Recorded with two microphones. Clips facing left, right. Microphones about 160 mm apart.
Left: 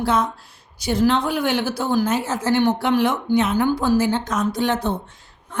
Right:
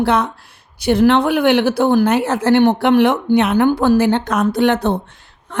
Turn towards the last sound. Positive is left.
turn(degrees=-65)  # may be behind; listen again after turning